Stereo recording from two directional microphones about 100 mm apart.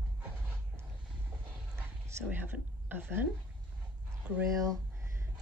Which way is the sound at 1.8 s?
25° right (ahead or behind).